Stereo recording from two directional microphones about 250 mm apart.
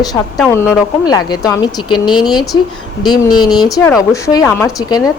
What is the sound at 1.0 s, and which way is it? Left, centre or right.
Speech, centre.